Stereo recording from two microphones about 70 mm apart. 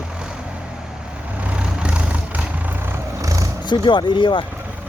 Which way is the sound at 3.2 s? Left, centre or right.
Right.